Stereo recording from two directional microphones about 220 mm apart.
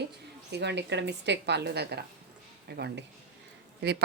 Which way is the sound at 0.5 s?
50° right (ahead or behind).